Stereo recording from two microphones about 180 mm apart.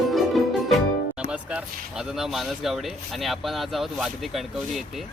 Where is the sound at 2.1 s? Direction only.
Centre (ahead or behind).